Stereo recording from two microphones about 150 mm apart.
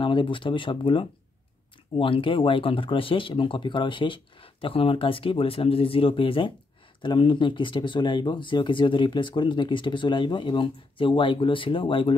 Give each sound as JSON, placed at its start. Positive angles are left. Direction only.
{"t": 0.0, "sound": "speech", "side_deg": 35}